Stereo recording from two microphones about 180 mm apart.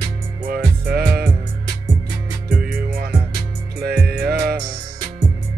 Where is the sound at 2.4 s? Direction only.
55° right (ahead or behind).